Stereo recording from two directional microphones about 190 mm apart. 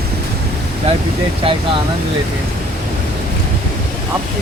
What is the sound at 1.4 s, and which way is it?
Speech, 30° right (ahead or behind).